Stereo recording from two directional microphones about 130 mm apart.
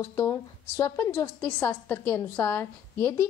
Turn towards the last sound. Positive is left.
turn(degrees=20)  # may be behind; listen again after turning